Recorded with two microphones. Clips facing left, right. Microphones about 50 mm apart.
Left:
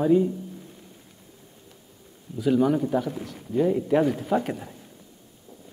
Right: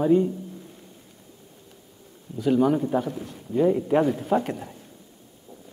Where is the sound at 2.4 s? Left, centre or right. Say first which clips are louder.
Right 1 dB; centre.